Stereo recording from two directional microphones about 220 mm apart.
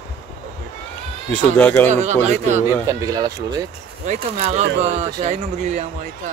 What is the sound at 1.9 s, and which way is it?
Speech, 30° right (ahead or behind).